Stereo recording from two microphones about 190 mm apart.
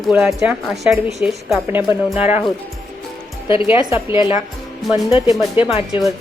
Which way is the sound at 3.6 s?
15° right (ahead or behind).